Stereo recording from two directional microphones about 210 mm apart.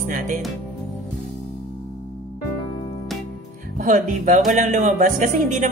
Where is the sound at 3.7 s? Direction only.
40° right (ahead or behind).